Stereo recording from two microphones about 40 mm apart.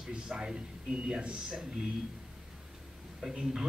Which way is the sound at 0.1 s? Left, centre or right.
Centre.